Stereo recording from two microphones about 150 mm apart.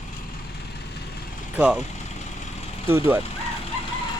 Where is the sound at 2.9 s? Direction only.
15° right (ahead or behind).